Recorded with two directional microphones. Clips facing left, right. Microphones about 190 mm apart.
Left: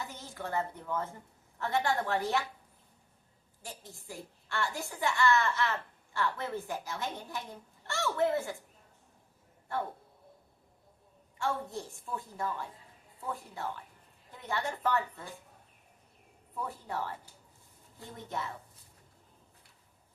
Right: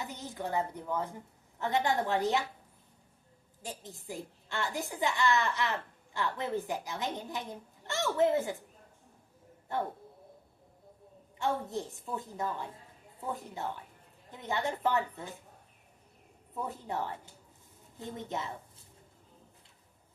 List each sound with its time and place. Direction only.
0.0 s a woman's voice: 20° right (ahead or behind)
3.6 s a woman's voice: 20° right (ahead or behind)
9.7 s a woman's voice: 20° right (ahead or behind)
11.3 s a woman's voice: 20° right (ahead or behind)
16.6 s a woman's voice: 20° right (ahead or behind)
18.3 s a woman's voice: 20° right (ahead or behind)